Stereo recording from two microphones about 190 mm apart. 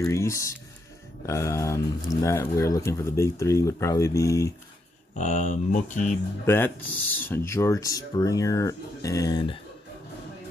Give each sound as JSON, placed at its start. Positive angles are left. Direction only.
{"t": 0.0, "sound": "speech", "side_deg": 15}
{"t": 5.1, "sound": "speech", "side_deg": 40}
{"t": 6.4, "sound": "speech", "side_deg": 10}